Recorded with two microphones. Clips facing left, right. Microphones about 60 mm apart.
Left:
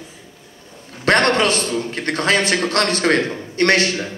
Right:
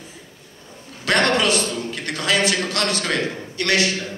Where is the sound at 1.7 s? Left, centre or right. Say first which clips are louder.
Left 5 dB; left.